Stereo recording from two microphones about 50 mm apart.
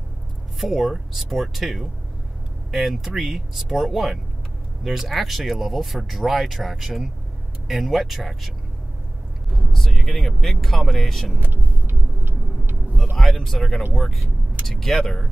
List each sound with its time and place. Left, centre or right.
0.6 s speech: centre
9.7 s speech: centre
11.3 s vehicle: right
13.2 s speech: centre